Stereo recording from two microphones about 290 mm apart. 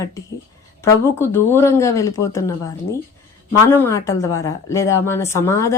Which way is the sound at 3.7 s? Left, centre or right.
Centre.